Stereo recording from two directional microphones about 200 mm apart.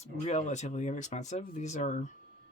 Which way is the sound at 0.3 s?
35° left (ahead or behind).